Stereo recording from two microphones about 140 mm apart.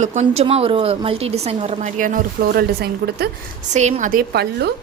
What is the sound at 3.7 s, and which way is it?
Speech, 55° right (ahead or behind).